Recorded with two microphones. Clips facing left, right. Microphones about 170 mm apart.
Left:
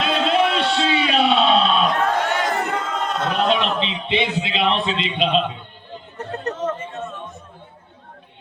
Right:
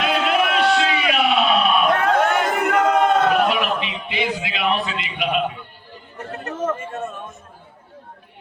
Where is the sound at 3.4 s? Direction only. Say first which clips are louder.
Left 1 dB; 25° left (ahead or behind).